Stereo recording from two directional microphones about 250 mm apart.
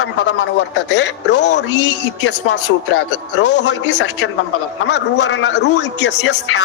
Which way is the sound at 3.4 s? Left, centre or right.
Left.